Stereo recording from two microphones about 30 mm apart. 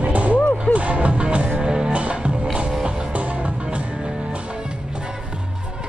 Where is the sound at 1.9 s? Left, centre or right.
Right.